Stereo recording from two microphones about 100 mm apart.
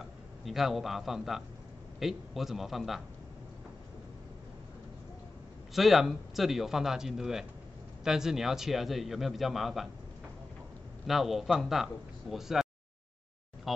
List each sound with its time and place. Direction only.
0.5 s a man's voice: 5° right (ahead or behind)
5.8 s a man's voice: centre (ahead or behind)
11.1 s a man's voice: centre (ahead or behind)
13.7 s speech: centre (ahead or behind)